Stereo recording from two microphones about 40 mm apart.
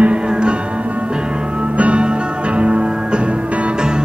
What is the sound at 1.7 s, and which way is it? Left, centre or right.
Music, right.